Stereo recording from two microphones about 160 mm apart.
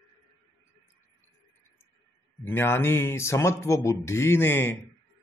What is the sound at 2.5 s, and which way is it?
Speech, 15° left (ahead or behind).